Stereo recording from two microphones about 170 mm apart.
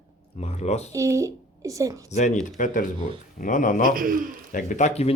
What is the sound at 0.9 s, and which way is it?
A child's voice, 20° right (ahead or behind).